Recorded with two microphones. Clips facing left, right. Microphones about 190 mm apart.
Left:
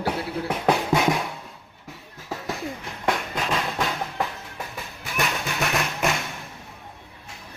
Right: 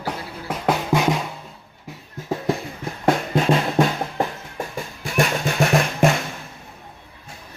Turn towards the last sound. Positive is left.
turn(degrees=-50)  # may be behind; listen again after turning